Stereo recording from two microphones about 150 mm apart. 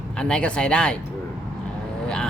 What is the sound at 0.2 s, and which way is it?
Speech, 5° left (ahead or behind).